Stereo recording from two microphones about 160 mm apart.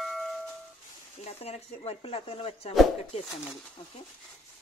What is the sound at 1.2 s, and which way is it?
Speech, 40° left (ahead or behind).